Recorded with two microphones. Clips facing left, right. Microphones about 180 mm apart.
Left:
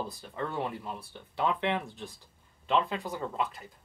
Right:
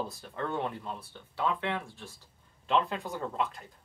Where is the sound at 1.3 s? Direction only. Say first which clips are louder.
Left 2 dB; 20° left (ahead or behind).